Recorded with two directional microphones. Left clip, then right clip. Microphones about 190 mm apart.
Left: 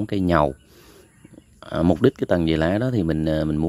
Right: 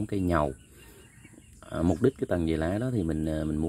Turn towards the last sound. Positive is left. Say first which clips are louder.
# left 8 dB
turn(degrees=25)  # may be behind; listen again after turning